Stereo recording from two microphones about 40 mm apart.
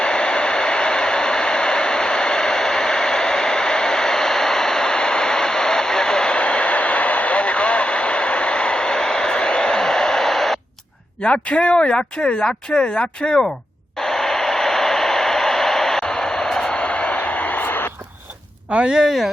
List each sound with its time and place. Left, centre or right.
0.0 s hair dryer: left
11.2 s speech: left
14.0 s a sound: centre
16.7 s radio: left
18.7 s speech: right
19.0 s speech: centre